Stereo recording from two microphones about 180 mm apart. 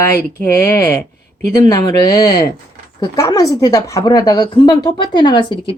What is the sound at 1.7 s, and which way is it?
A woman's voice, 20° left (ahead or behind).